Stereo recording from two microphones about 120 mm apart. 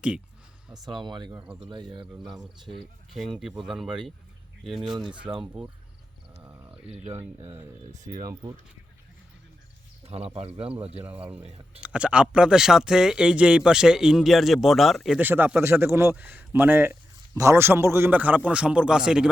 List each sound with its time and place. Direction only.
0.7 s speech: 40° right (ahead or behind)
3.1 s speech: centre (ahead or behind)
5.3 s speech: 40° right (ahead or behind)
6.4 s sheep: 25° right (ahead or behind)
8.2 s speech: 30° right (ahead or behind)
10.0 s speech: 55° right (ahead or behind)
11.0 s a man's voice: 15° right (ahead or behind)
11.4 s speech: 55° right (ahead or behind)
11.8 s speech: 10° right (ahead or behind)
15.2 s a man's voice: 15° right (ahead or behind)